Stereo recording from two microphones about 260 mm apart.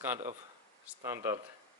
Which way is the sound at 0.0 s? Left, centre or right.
Centre.